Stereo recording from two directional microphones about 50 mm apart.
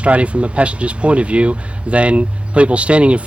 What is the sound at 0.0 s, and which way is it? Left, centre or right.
Speech, right.